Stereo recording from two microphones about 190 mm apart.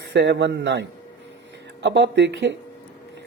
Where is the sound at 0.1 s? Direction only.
65° right (ahead or behind).